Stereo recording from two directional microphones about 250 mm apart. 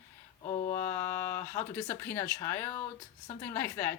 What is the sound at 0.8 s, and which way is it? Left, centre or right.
Speech, centre.